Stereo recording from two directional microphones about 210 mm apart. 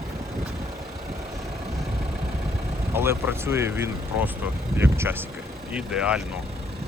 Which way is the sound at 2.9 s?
10° right (ahead or behind).